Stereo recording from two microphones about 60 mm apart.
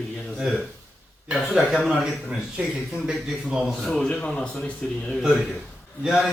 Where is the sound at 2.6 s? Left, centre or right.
Right.